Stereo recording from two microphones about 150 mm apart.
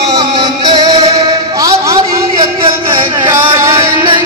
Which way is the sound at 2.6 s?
35° right (ahead or behind).